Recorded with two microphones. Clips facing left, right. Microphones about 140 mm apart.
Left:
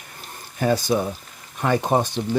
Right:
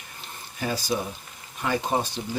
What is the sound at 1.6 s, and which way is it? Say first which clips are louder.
Speech: left 5 dB; 55° left (ahead or behind).